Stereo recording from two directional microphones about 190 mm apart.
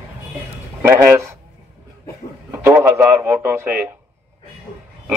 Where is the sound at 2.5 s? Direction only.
15° right (ahead or behind).